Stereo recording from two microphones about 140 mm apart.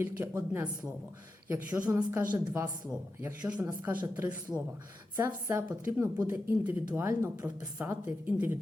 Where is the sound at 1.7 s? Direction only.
25° right (ahead or behind).